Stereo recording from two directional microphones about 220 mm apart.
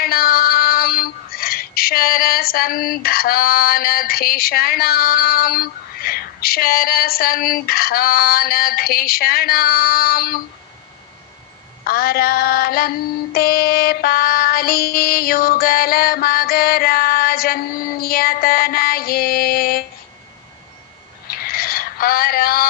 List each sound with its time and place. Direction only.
0.0 s child singing: 40° left (ahead or behind)
11.8 s female singing: 45° left (ahead or behind)
21.3 s a sound: 45° left (ahead or behind)